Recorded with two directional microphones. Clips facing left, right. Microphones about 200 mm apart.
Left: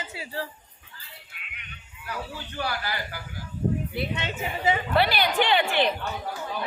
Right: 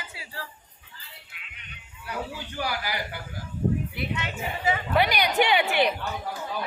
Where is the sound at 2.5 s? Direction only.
10° right (ahead or behind).